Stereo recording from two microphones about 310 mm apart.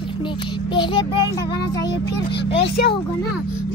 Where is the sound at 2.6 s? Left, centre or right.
Left.